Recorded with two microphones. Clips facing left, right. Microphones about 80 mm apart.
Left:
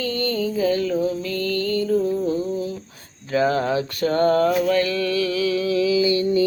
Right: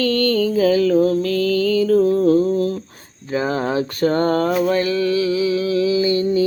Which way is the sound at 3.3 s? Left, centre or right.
Right.